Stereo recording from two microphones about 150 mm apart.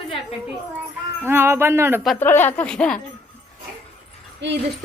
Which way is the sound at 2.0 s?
10° left (ahead or behind).